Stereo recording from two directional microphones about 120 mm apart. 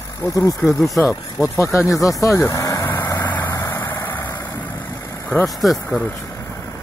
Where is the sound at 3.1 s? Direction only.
15° left (ahead or behind).